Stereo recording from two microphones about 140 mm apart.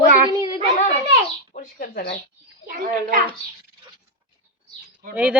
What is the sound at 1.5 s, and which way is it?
Speech, 80° left.